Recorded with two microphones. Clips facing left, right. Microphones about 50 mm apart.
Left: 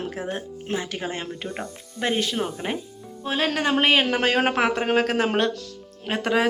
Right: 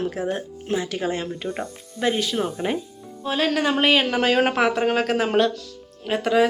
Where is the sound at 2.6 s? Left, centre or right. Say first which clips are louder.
Right 4 dB; centre.